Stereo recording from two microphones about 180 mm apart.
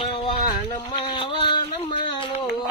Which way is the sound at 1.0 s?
30° left (ahead or behind).